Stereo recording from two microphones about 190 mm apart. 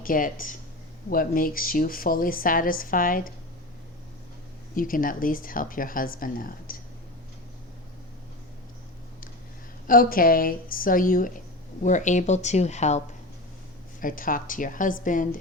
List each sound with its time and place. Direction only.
0.0 s speech: 45° left (ahead or behind)
4.7 s speech: 45° left (ahead or behind)
9.8 s speech: 45° left (ahead or behind)
14.0 s speech: 45° left (ahead or behind)